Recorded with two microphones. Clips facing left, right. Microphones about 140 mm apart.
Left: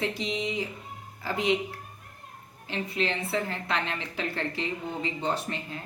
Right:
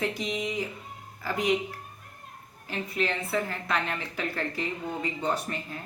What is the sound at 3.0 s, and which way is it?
A woman's voice, 30° left (ahead or behind).